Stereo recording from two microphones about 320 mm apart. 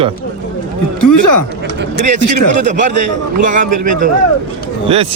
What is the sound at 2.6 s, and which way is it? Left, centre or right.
A man's voice, right.